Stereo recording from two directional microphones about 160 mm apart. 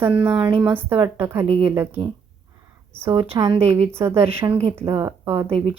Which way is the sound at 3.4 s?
20° right (ahead or behind).